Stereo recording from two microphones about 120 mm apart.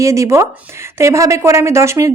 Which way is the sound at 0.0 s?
25° right (ahead or behind).